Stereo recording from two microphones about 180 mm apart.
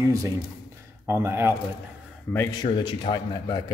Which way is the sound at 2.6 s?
25° left (ahead or behind).